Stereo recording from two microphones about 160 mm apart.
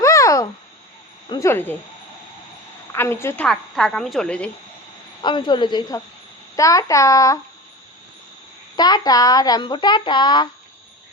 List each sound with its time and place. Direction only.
0.0 s a sound: 20° left (ahead or behind)
1.3 s a woman's voice: 15° left (ahead or behind)
2.9 s a woman's voice: 15° left (ahead or behind)
3.4 s a woman's voice: 5° left (ahead or behind)
5.2 s speech: 30° left (ahead or behind)
8.7 s speech: 25° left (ahead or behind)